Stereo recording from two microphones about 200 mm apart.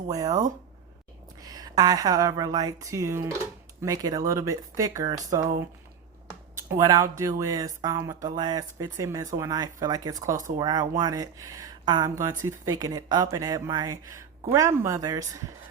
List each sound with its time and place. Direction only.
0.1 s speech: 20° right (ahead or behind)
1.4 s speech: 20° right (ahead or behind)
6.7 s speech: 15° right (ahead or behind)